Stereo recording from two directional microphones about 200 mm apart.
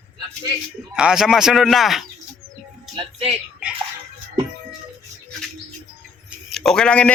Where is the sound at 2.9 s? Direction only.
30° right (ahead or behind).